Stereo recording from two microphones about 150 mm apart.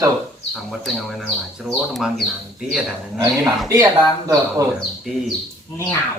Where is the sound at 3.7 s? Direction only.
20° right (ahead or behind).